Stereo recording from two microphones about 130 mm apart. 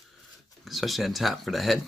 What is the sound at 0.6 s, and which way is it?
Speech, centre (ahead or behind).